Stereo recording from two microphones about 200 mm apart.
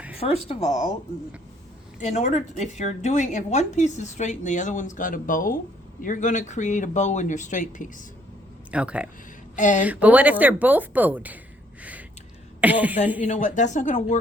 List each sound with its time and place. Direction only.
0.4 s speech: 35° left (ahead or behind)
2.0 s speech: 35° left (ahead or behind)
8.7 s speech: 5° right (ahead or behind)
9.6 s speech: 40° left (ahead or behind)
9.8 s speech: 10° right (ahead or behind)
11.8 s a sound: 5° right (ahead or behind)
12.5 s speech: 10° right (ahead or behind)
13.2 s speech: 35° left (ahead or behind)